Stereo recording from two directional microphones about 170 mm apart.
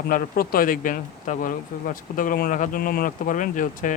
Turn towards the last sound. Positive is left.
turn(degrees=50)  # may be behind; listen again after turning